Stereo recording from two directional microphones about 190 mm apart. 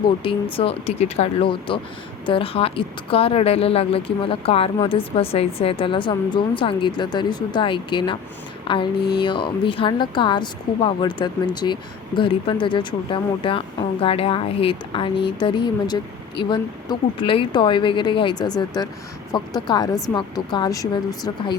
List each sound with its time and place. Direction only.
0.5 s speech: 30° left (ahead or behind)